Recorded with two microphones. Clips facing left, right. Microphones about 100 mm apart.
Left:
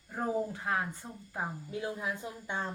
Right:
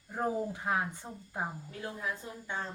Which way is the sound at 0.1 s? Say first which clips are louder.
Even; 15° right (ahead or behind).